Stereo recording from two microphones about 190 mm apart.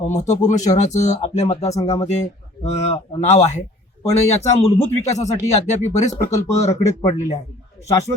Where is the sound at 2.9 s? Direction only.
35° left (ahead or behind).